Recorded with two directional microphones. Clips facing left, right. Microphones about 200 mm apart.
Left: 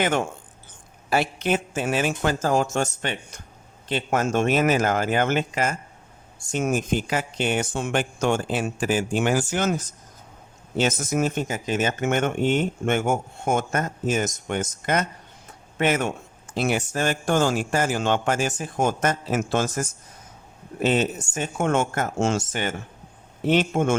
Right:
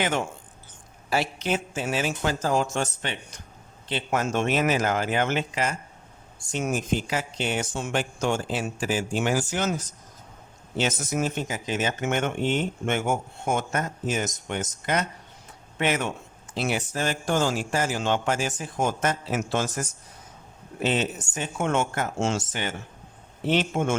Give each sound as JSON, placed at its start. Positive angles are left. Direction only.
{"t": 0.0, "sound": "speech", "side_deg": 50}